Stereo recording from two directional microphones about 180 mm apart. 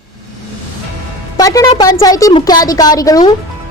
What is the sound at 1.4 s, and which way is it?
Music, 20° left (ahead or behind).